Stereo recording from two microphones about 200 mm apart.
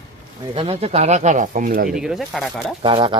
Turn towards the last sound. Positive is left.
turn(degrees=-25)  # may be behind; listen again after turning